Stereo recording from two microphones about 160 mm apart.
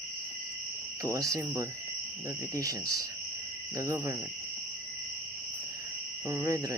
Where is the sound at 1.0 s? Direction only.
20° right (ahead or behind).